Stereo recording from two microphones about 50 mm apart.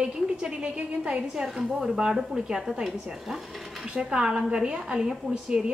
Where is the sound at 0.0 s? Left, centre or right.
Centre.